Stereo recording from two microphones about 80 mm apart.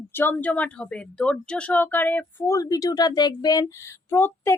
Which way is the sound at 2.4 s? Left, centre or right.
Left.